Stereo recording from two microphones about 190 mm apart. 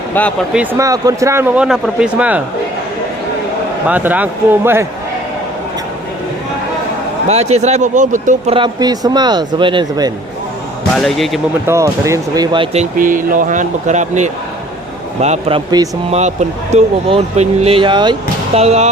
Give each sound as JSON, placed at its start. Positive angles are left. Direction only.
{"t": 0.1, "sound": "speech", "side_deg": 10}
{"t": 0.5, "sound": "speech", "side_deg": -10}
{"t": 3.8, "sound": "speech", "side_deg": -10}
{"t": 7.3, "sound": "speech", "side_deg": -35}
{"t": 8.5, "sound": "speech", "side_deg": -25}
{"t": 10.9, "sound": "speech", "side_deg": 0}
{"t": 11.6, "sound": "speech", "side_deg": -15}
{"t": 16.0, "sound": "speech", "side_deg": -35}